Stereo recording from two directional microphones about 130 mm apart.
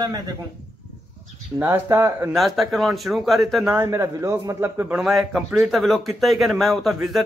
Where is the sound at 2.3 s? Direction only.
Centre (ahead or behind).